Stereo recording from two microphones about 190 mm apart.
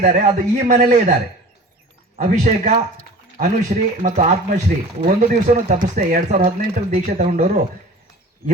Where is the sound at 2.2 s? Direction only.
40° right (ahead or behind).